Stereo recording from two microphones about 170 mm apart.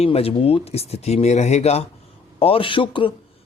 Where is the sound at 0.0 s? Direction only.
35° left (ahead or behind).